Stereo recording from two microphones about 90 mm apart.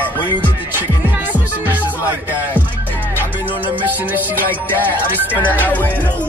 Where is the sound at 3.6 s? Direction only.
20° right (ahead or behind).